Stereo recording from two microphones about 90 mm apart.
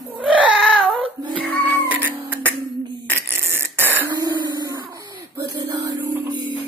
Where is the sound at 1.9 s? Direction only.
20° right (ahead or behind).